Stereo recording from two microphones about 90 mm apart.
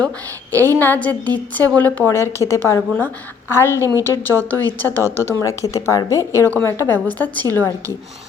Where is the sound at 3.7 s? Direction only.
35° right (ahead or behind).